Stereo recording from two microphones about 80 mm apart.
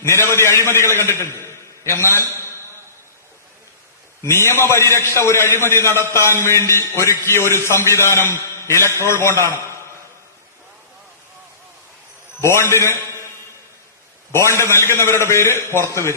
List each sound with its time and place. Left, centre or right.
0.0 s a man's voice: left
4.2 s a man's voice: left
12.4 s a man's voice: left
14.3 s a man's voice: left